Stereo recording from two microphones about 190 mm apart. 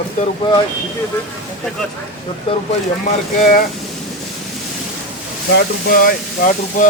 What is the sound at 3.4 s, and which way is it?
Speech, 50° left (ahead or behind).